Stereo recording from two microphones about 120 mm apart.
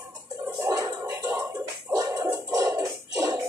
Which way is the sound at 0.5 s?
25° right (ahead or behind).